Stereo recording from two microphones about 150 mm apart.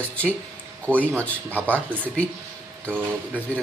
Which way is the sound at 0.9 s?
10° right (ahead or behind).